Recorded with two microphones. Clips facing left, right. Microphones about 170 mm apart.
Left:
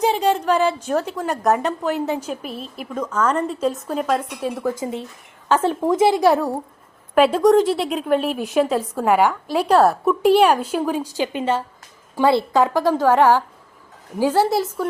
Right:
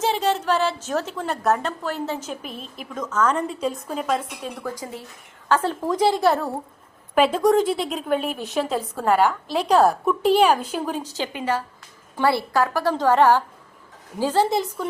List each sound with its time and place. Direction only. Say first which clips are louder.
0.0 s a woman's voice: left 4 dB; 10° left (ahead or behind)
1.6 s a woman's voice: left 5 dB; 15° left (ahead or behind); by 4.5 s centre (ahead or behind)
4.8 s a woman's voice: left 8 dB; 25° left (ahead or behind)
7.2 s a woman's voice: left 4 dB; 5° left (ahead or behind)
9.0 s a woman's voice: left 2 dB; 15° left (ahead or behind)